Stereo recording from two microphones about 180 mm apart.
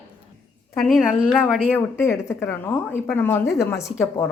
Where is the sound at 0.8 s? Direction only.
Centre (ahead or behind).